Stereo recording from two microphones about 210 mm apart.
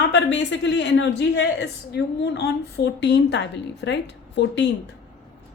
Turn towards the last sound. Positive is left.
turn(degrees=55)  # may be behind; listen again after turning